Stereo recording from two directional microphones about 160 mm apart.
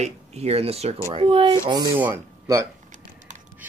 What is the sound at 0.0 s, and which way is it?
Speech, 45° right (ahead or behind).